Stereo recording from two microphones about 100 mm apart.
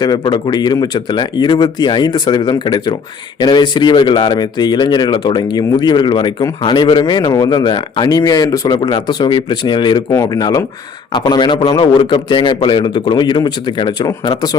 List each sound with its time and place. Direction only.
0.0 s speech: 40° left (ahead or behind)
8.8 s speech: 50° left (ahead or behind)